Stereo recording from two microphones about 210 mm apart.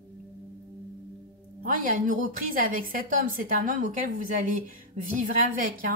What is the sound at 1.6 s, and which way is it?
Speech, 40° right (ahead or behind).